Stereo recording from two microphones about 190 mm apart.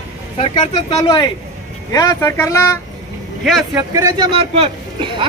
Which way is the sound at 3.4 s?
Centre (ahead or behind).